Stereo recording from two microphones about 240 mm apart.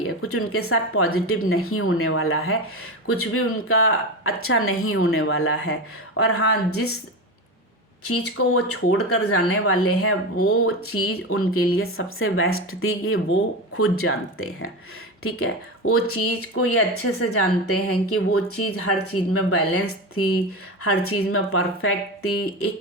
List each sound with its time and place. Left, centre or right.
0.2 s speech: left
8.0 s speech: left
15.9 s a woman's voice: left